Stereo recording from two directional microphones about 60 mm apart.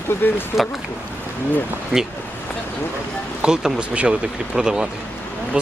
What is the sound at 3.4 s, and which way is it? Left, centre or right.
Speech, centre.